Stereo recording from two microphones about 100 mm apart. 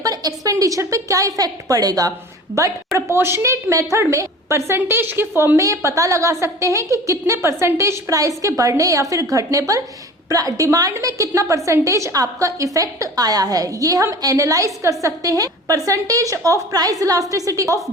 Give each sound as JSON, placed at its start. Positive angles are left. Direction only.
{"t": 0.0, "sound": "a woman's voice", "side_deg": -40}